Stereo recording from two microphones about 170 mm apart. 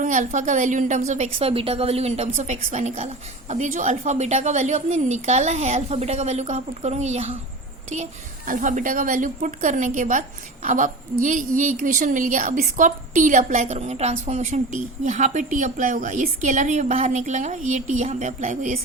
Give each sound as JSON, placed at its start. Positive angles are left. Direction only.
{"t": 0.0, "sound": "a woman's voice", "side_deg": -45}
{"t": 8.4, "sound": "a woman's voice", "side_deg": -50}